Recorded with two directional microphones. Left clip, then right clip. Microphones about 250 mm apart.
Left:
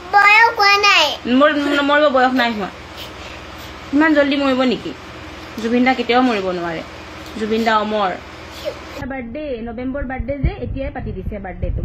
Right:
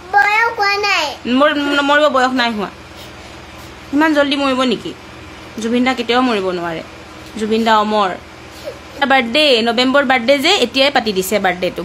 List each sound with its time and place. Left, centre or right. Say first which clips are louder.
0.1 s child singing: left 2 dB; centre
1.3 s a man's voice: right 3 dB; centre
4.0 s a man's voice: right 1 dB; centre
9.0 s a woman's voice: right 17 dB; right